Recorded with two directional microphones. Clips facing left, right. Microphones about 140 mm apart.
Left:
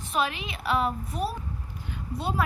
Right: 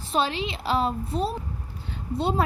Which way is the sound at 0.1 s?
30° right (ahead or behind).